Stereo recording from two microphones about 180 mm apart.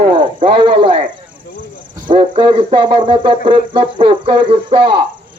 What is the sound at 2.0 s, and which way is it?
Speech, 25° right (ahead or behind).